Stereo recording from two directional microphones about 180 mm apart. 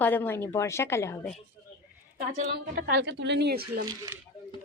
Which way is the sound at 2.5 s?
65° right (ahead or behind).